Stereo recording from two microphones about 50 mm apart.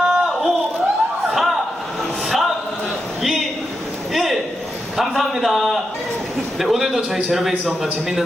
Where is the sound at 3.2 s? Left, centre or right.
Centre.